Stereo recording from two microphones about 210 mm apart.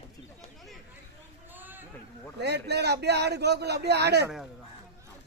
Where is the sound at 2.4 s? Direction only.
50° right (ahead or behind).